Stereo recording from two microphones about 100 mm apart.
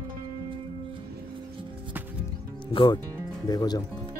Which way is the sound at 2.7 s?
60° left (ahead or behind).